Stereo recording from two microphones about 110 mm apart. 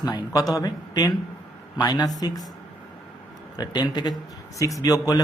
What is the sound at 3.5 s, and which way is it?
Speech, 40° left (ahead or behind).